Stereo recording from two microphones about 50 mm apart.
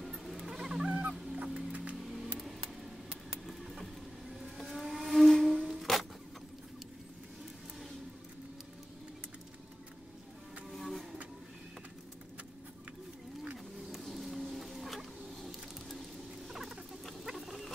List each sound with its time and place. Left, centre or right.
0.0 s fowl: centre
1.3 s music: right
2.0 s music: centre
3.4 s vehicle: centre
10.7 s vehicle: centre
13.9 s a sound: centre
16.4 s rodents: centre
17.0 s a sound: centre